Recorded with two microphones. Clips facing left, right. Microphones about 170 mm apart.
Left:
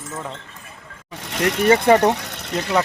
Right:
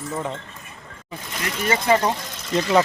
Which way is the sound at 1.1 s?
80° left.